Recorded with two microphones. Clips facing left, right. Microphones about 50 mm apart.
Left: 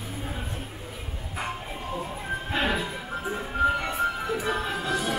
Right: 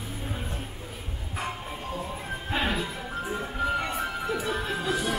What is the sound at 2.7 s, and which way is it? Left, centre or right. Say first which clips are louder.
Music: left 1 dB; centre.